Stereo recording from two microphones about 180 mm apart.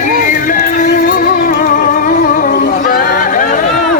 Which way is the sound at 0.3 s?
50° left (ahead or behind).